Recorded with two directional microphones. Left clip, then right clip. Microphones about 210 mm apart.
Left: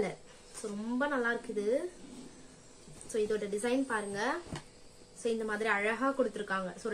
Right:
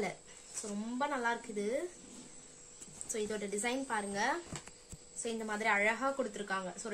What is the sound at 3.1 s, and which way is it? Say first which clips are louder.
A woman's voice: left 5 dB; 35° right (ahead or behind).